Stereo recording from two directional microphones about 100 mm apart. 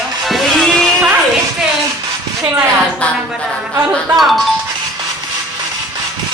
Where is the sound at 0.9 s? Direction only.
20° right (ahead or behind).